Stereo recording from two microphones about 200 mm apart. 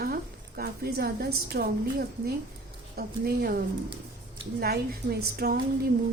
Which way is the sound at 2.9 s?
50° right (ahead or behind).